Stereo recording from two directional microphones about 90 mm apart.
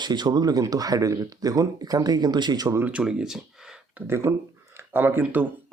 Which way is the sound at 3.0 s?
5° right (ahead or behind).